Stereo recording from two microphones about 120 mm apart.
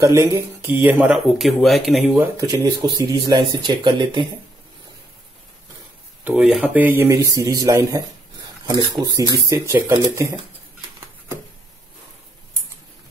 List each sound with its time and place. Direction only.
0.0 s speech: 25° right (ahead or behind)
1.1 s speech: centre (ahead or behind)
2.1 s speech: 30° right (ahead or behind)
3.2 s speech: 40° right (ahead or behind)
6.2 s speech: 5° right (ahead or behind)